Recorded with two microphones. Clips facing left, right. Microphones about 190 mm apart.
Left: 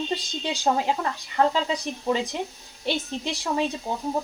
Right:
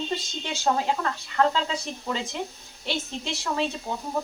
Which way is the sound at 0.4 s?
15° left (ahead or behind).